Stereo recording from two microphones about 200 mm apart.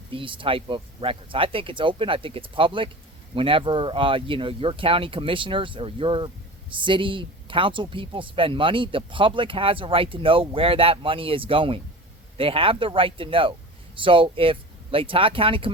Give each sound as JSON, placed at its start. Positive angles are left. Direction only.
{"t": 0.1, "sound": "speech", "side_deg": -25}